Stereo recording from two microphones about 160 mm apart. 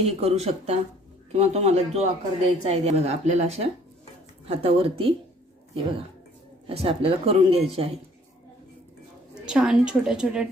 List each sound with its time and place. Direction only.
0.0 s speech: 40° right (ahead or behind)
6.7 s speech: 35° right (ahead or behind)
9.3 s a woman's voice: 5° right (ahead or behind)